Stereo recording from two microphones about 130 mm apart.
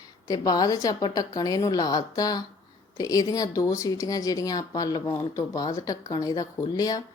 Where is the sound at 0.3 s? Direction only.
30° left (ahead or behind).